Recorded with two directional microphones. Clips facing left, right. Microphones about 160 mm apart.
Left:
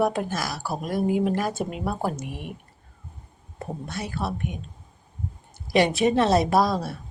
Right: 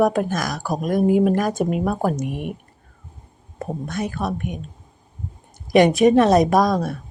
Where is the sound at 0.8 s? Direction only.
45° right (ahead or behind).